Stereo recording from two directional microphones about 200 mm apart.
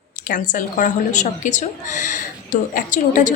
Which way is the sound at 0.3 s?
40° left (ahead or behind).